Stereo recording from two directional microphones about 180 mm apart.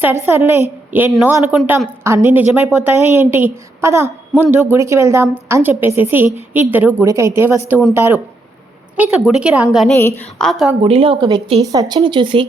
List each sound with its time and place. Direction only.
0.0 s a woman's voice: 15° right (ahead or behind)
9.0 s a woman's voice: 5° right (ahead or behind)
9.9 s a woman's voice: 10° left (ahead or behind)
10.8 s speech: 30° right (ahead or behind)